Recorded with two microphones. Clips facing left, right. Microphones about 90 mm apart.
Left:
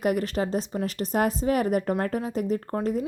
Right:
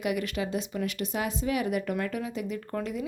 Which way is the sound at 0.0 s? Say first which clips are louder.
Left 5 dB; 40° left (ahead or behind).